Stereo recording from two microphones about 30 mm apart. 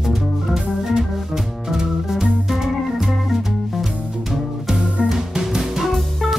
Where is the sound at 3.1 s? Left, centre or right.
Centre.